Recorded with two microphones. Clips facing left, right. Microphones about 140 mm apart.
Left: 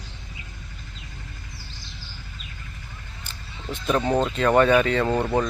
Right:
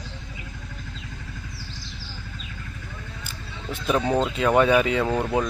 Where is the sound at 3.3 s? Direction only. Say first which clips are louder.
Left 1 dB; 10° right (ahead or behind).